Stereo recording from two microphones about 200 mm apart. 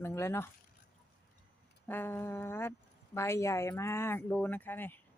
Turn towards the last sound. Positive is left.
turn(degrees=10)  # may be behind; listen again after turning